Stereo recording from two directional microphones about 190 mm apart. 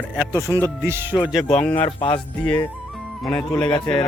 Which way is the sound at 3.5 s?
10° left (ahead or behind).